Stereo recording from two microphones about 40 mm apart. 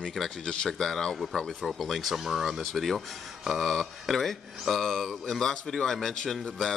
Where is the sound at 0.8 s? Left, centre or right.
Centre.